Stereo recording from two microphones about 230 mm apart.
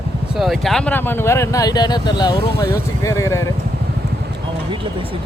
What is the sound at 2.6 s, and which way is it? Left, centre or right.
Speech, centre.